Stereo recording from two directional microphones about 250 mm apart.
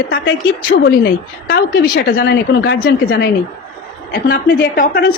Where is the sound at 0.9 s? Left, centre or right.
Left.